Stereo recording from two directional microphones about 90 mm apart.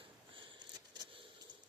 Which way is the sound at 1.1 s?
80° right.